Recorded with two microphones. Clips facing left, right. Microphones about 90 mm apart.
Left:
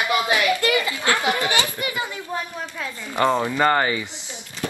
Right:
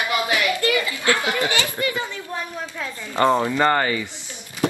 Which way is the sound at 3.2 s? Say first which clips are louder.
Right 1 dB; 15° left (ahead or behind).